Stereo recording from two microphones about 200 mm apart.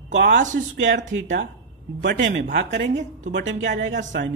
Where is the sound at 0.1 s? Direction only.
65° right (ahead or behind).